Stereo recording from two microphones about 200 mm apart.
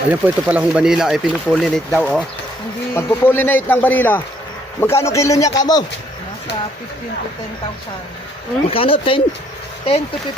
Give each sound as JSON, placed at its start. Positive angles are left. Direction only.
{"t": 0.1, "sound": "speech", "side_deg": -5}
{"t": 8.6, "sound": "speech", "side_deg": 30}